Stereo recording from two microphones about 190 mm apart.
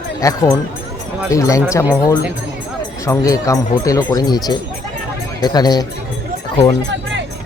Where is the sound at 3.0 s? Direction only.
15° left (ahead or behind).